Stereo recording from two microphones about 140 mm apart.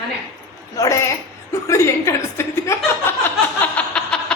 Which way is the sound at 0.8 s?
25° left (ahead or behind).